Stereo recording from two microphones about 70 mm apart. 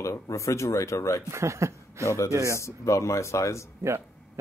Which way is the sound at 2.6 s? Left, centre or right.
Left.